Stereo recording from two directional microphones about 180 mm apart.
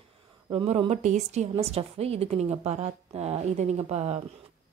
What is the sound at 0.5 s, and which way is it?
A woman's voice, 30° right (ahead or behind).